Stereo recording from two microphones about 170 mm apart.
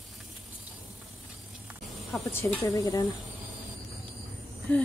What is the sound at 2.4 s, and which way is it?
Speech, 20° left (ahead or behind).